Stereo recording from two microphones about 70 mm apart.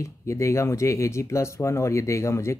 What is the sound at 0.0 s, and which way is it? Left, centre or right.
Speech, left.